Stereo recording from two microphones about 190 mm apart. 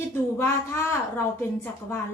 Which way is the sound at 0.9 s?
10° left (ahead or behind).